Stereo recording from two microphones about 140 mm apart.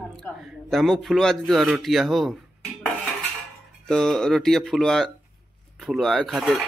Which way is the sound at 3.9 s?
5° left (ahead or behind).